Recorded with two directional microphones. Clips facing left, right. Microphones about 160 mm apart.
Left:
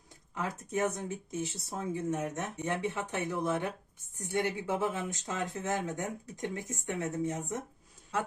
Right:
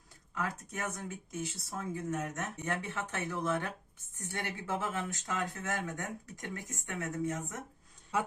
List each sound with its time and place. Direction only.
0.3 s speech: 20° left (ahead or behind)